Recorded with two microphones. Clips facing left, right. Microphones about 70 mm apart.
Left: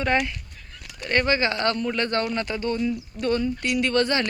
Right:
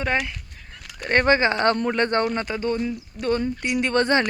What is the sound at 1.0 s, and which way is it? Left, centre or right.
Speech, right.